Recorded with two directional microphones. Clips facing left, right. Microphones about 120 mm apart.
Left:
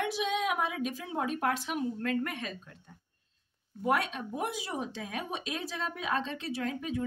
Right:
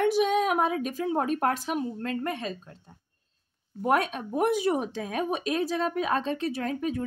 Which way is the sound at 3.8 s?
45° right (ahead or behind).